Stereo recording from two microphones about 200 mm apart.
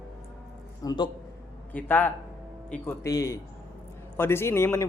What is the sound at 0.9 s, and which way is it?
Speech, 20° left (ahead or behind).